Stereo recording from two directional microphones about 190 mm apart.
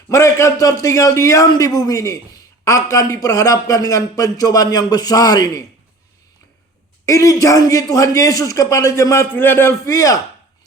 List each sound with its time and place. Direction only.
0.1 s a man's voice: 15° left (ahead or behind)
7.0 s a man's voice: 15° left (ahead or behind)